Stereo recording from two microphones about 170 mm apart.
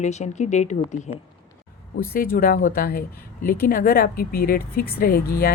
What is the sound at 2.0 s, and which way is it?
Speech, 60° left (ahead or behind).